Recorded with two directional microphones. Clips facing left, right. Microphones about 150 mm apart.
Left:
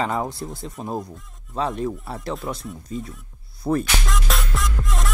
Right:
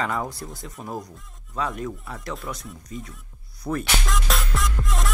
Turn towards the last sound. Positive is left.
turn(degrees=0)  # may be behind; listen again after turning